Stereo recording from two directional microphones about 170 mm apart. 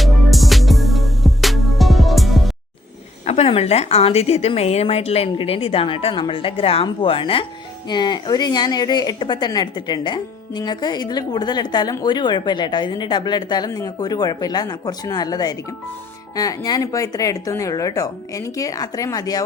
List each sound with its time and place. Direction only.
0.0 s music: centre (ahead or behind)
3.2 s a woman's voice: 35° left (ahead or behind); by 19.5 s 20° left (ahead or behind)